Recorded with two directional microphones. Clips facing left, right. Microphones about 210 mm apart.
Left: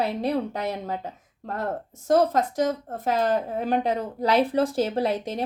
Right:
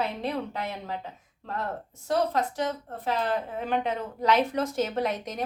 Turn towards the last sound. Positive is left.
turn(degrees=30)  # may be behind; listen again after turning